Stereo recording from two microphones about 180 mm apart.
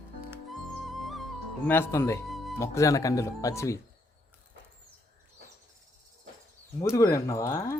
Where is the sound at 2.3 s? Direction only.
Centre (ahead or behind).